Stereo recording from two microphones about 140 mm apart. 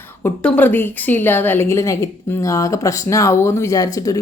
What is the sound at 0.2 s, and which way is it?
Speech, 15° left (ahead or behind).